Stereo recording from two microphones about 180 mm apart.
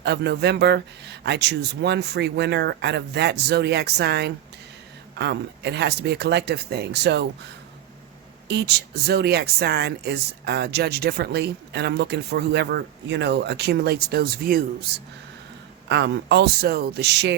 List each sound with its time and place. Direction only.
0.0 s speech: 70° right (ahead or behind)
8.4 s speech: 65° right (ahead or behind)